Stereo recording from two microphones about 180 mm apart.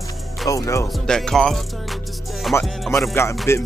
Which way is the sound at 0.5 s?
15° left (ahead or behind).